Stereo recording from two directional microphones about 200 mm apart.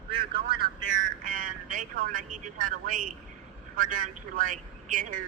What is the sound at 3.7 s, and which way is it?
A man's voice, 40° right (ahead or behind).